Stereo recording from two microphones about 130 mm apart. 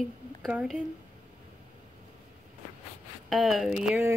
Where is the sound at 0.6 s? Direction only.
10° right (ahead or behind).